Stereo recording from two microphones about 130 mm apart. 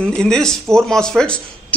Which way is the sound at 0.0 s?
5° left (ahead or behind).